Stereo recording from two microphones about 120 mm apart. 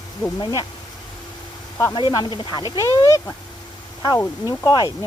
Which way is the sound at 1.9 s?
40° left (ahead or behind).